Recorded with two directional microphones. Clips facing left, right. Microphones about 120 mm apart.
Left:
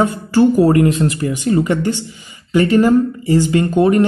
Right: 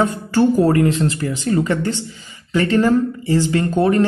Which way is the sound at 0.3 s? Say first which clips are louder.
Left 3 dB; 15° left (ahead or behind).